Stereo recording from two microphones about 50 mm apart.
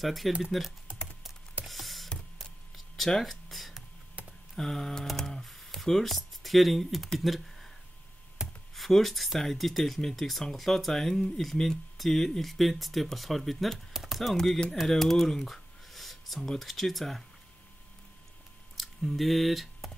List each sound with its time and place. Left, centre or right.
0.0 s speech: centre
1.7 s a sound: centre
4.6 s typing: centre
5.1 s a sound: centre
5.8 s speech: centre
8.4 s computer keyboard: centre
8.7 s speech: centre
13.9 s typing: centre
14.3 s speech: centre
18.8 s speech: centre